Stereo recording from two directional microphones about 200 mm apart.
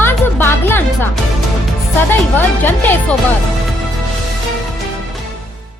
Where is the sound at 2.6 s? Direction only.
10° left (ahead or behind).